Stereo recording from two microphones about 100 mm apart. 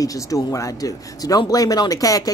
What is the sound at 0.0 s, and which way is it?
A woman's voice, 35° left (ahead or behind).